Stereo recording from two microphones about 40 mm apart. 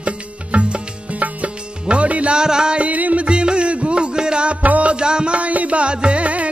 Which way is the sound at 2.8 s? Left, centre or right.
Right.